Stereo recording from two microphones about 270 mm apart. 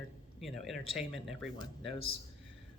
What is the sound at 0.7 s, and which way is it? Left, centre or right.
Speech, right.